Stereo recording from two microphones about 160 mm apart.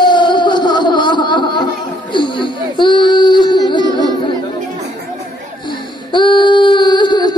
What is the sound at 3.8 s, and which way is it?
Chatter, 25° right (ahead or behind).